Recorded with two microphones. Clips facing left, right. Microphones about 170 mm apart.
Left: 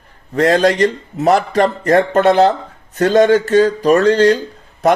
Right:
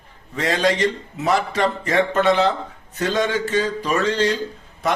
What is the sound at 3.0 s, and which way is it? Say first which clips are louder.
A man's voice: left 10 dB; 60° left (ahead or behind).